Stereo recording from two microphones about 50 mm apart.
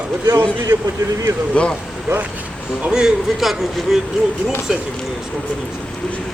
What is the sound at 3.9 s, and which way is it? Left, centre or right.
Speech, centre.